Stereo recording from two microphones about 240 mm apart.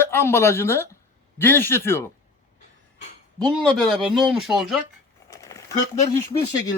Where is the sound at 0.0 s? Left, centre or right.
Centre.